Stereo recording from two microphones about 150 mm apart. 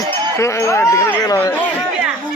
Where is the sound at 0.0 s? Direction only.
20° left (ahead or behind).